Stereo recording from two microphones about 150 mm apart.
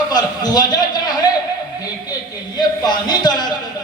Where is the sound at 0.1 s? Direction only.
25° left (ahead or behind).